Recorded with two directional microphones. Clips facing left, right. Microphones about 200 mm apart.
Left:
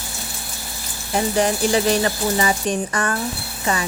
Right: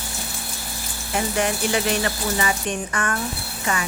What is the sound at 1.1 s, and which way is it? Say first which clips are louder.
Speech: left 4 dB; 35° left (ahead or behind).